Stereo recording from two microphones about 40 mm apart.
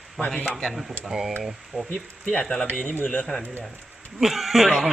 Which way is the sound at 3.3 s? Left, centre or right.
Left.